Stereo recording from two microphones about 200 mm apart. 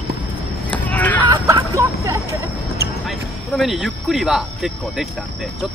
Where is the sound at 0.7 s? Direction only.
5° left (ahead or behind).